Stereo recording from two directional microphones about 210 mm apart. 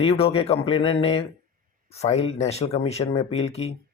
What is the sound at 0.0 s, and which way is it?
Speech, 25° left (ahead or behind).